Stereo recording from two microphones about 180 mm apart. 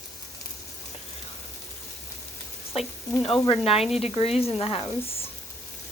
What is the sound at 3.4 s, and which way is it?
Speech, 30° left (ahead or behind).